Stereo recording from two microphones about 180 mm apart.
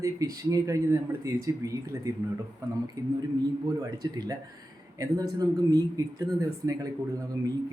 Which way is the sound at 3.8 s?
20° right (ahead or behind).